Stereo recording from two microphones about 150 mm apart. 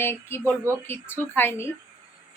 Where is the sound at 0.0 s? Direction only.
15° left (ahead or behind).